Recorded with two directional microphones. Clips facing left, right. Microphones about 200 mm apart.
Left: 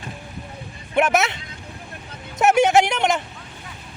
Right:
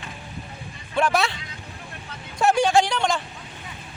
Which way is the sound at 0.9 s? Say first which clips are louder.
Left 3 dB; 20° left (ahead or behind).